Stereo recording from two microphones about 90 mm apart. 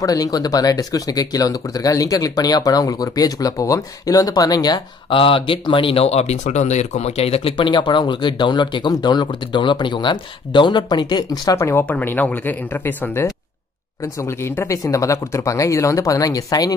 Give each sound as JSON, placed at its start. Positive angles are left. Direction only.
{"t": 0.0, "sound": "speech", "side_deg": 45}
{"t": 5.1, "sound": "speech", "side_deg": 70}
{"t": 7.2, "sound": "speech", "side_deg": 90}
{"t": 11.5, "sound": "speech", "side_deg": 35}
{"t": 11.8, "sound": "speech", "side_deg": 20}